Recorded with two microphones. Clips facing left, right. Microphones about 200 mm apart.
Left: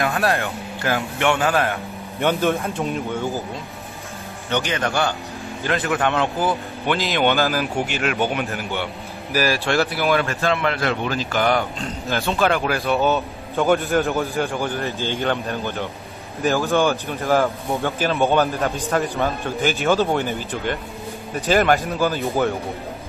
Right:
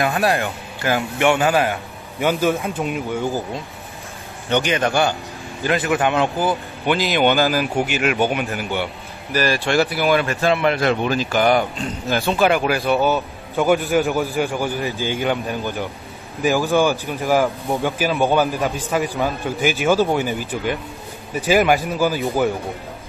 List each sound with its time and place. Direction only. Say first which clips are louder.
0.4 s a man's voice: right 1 dB; 10° right (ahead or behind)
4.5 s a man's voice: right 4 dB; 15° right (ahead or behind); by 14.4 s centre (ahead or behind)
14.4 s a man's voice: right 2 dB; 15° right (ahead or behind)